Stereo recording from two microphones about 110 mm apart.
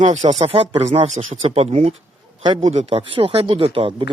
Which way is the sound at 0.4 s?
60° right (ahead or behind).